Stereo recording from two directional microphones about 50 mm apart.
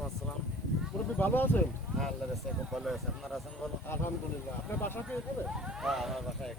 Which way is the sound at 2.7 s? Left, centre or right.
Centre.